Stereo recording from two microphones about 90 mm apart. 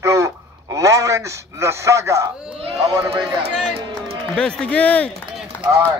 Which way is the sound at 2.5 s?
90° right.